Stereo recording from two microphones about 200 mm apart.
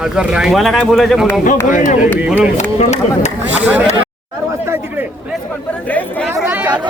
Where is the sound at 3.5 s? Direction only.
10° right (ahead or behind).